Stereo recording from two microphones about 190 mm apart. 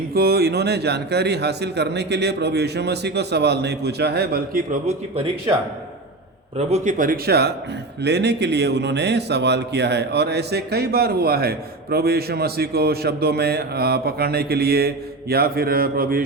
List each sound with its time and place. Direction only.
0.1 s speech: 55° right (ahead or behind); by 5.5 s 30° right (ahead or behind)
6.7 s speech: 35° right (ahead or behind)